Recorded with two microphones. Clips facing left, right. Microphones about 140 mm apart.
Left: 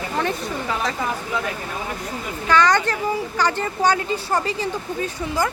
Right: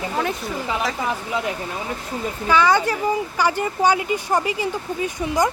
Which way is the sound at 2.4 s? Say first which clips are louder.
Even; 10° right (ahead or behind).